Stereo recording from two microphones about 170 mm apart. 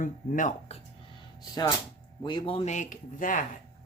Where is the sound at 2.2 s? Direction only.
25° left (ahead or behind); by 3.5 s 50° left (ahead or behind).